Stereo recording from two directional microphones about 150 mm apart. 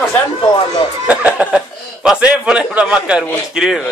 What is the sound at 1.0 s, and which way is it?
Speech, 10° right (ahead or behind).